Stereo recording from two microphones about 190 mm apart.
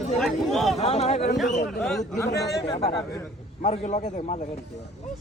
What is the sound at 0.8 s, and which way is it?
Speech, 35° left (ahead or behind).